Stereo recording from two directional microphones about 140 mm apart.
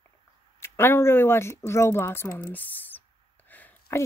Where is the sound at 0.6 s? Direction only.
15° left (ahead or behind).